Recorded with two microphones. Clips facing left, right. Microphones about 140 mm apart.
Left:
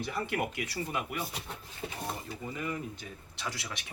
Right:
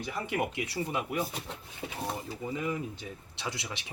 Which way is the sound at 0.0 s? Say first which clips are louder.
Right 1 dB; 20° right (ahead or behind).